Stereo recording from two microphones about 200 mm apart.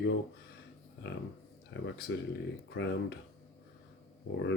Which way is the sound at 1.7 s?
60° left (ahead or behind).